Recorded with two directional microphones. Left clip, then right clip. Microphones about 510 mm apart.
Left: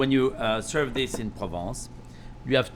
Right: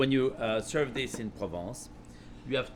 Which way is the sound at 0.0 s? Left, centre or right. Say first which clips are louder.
Left 4 dB; centre.